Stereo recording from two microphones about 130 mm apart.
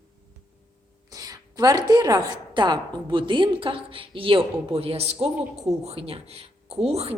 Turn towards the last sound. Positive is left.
turn(degrees=-50)  # may be behind; listen again after turning